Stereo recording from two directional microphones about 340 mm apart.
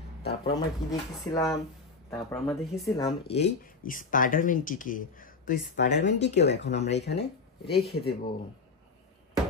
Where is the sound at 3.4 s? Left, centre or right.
Left.